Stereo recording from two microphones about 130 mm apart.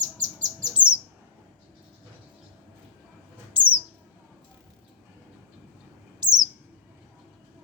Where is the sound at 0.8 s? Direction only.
10° right (ahead or behind).